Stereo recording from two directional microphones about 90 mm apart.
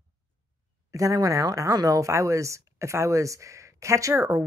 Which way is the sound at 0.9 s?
40° right (ahead or behind).